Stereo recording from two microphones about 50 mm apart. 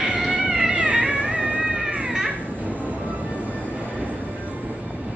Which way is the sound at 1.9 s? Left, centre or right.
Right.